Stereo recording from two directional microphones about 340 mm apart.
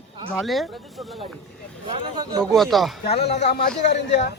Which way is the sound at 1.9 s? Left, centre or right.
Centre.